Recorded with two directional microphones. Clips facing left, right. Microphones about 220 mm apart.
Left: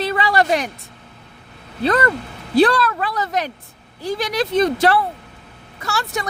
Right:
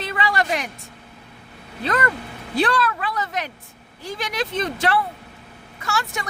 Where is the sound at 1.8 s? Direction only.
35° left (ahead or behind).